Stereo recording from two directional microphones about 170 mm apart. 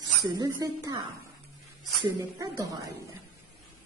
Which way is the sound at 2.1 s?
20° right (ahead or behind).